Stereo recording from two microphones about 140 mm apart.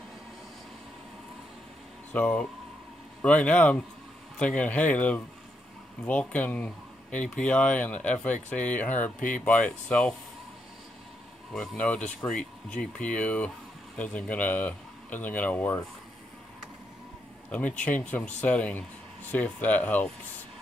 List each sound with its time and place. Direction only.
2.1 s speech: 10° left (ahead or behind)
11.5 s speech: 5° left (ahead or behind)
17.5 s speech: 10° left (ahead or behind)